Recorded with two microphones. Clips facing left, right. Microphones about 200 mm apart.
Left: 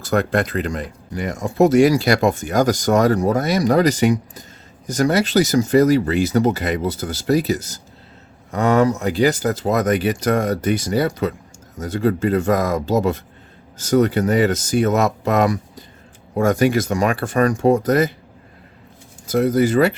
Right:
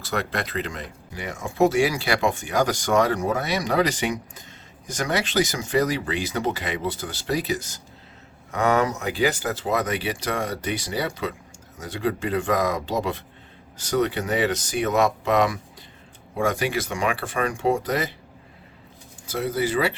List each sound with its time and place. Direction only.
0.0 s speech: 50° left (ahead or behind)
19.3 s speech: 45° left (ahead or behind)